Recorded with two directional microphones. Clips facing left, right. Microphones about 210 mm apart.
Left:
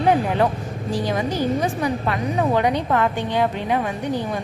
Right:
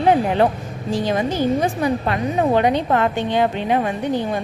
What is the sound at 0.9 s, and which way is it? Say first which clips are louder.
A woman's voice: right 3 dB; 25° right (ahead or behind).